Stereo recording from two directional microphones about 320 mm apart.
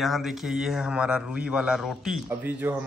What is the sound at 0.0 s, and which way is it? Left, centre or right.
A man's voice, centre.